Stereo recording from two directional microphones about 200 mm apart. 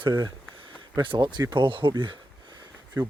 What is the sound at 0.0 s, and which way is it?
Speech, 15° right (ahead or behind).